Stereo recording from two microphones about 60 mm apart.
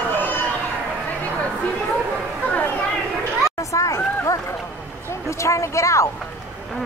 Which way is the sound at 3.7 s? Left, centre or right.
Left.